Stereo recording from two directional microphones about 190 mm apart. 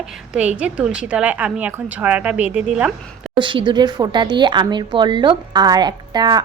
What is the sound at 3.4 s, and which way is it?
Speech, 25° right (ahead or behind).